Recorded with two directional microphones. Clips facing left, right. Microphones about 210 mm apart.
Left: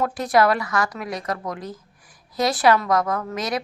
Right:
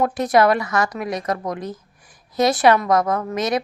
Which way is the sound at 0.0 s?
20° right (ahead or behind).